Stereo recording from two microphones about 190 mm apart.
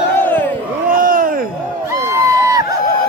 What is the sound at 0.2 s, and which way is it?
Crowd, 10° left (ahead or behind).